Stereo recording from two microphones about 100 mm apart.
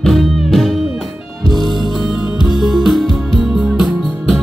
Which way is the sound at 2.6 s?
Centre (ahead or behind).